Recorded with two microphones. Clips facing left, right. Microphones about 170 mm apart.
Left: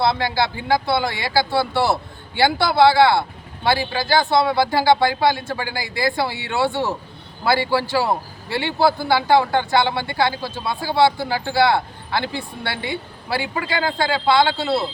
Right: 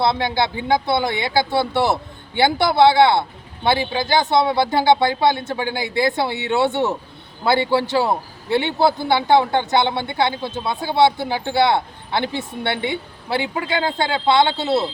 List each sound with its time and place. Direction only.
0.0 s speech: 20° right (ahead or behind)